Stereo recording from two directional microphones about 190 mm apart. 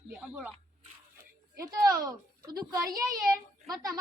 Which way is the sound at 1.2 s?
15° right (ahead or behind).